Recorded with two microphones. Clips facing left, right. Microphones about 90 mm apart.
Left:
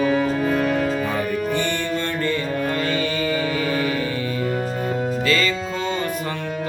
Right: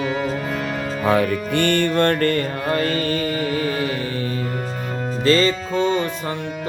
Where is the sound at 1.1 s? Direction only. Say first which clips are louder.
Right 4 dB; 65° right (ahead or behind); by 3.3 s 45° right (ahead or behind).